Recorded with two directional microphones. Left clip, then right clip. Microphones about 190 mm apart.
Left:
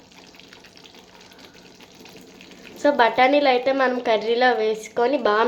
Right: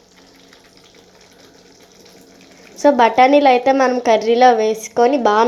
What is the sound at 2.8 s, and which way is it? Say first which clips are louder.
A woman's voice: right 6 dB; 30° right (ahead or behind).